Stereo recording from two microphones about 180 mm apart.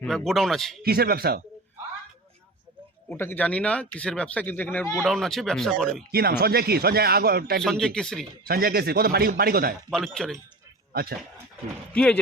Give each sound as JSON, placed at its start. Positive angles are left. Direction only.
{"t": 0.0, "sound": "speech", "side_deg": 0}
{"t": 0.8, "sound": "speech", "side_deg": -55}
{"t": 3.1, "sound": "speech", "side_deg": 10}
{"t": 4.9, "sound": "speech", "side_deg": 0}
{"t": 6.1, "sound": "speech", "side_deg": -60}
{"t": 7.6, "sound": "speech", "side_deg": 0}
{"t": 8.4, "sound": "speech", "side_deg": -55}
{"t": 9.9, "sound": "speech", "side_deg": 0}
{"t": 11.9, "sound": "speech", "side_deg": 5}